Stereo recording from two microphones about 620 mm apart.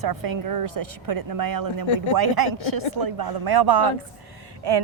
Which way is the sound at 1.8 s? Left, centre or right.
Left.